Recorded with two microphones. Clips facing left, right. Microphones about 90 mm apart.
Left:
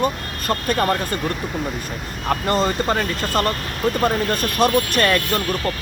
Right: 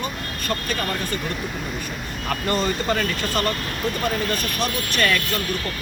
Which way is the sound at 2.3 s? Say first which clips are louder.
Left 4 dB; 35° left (ahead or behind).